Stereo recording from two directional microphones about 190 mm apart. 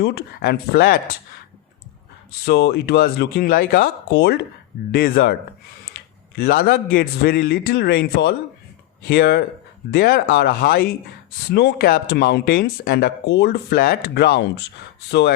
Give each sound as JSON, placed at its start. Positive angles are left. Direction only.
{"t": 0.0, "sound": "speech", "side_deg": 60}
{"t": 2.5, "sound": "speech", "side_deg": 60}